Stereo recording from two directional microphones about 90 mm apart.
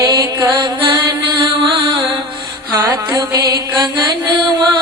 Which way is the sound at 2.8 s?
40° right (ahead or behind).